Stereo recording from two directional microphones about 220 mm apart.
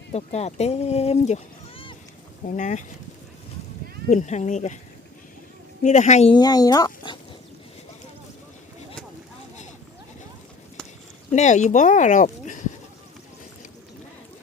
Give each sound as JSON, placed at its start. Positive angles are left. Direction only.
{"t": 0.1, "sound": "speech", "side_deg": 30}
{"t": 4.1, "sound": "speech", "side_deg": 35}
{"t": 5.8, "sound": "speech", "side_deg": 35}
{"t": 6.3, "sound": "speech", "side_deg": 15}
{"t": 11.3, "sound": "speech", "side_deg": 35}